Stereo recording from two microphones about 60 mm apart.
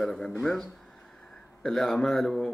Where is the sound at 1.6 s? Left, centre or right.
Centre.